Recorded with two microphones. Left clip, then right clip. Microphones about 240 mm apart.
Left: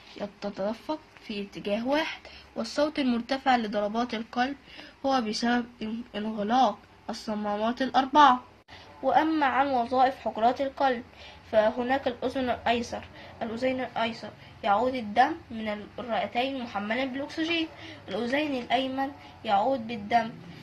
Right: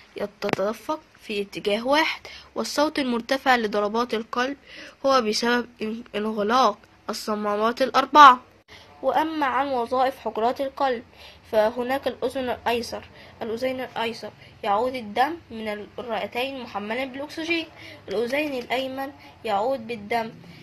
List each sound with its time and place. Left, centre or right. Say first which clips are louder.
0.2 s speech: right 7 dB; right
9.0 s speech: right 1 dB; right